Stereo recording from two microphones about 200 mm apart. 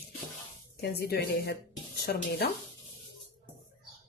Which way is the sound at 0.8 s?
50° left (ahead or behind).